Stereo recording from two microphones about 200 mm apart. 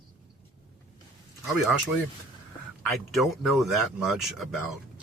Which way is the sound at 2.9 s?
Centre (ahead or behind).